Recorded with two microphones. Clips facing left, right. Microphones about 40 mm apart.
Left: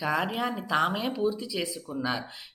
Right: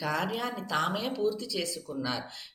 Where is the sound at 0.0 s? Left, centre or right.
Centre.